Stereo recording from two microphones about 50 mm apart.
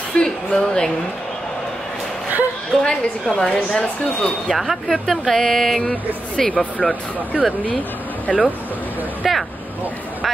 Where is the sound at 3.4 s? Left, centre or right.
Centre.